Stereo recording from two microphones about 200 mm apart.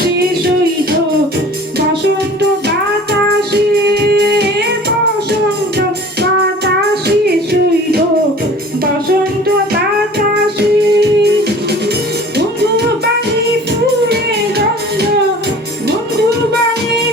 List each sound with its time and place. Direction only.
0.2 s music: 50° right (ahead or behind)
2.6 s music: 55° right (ahead or behind)
10.2 s music: 55° right (ahead or behind)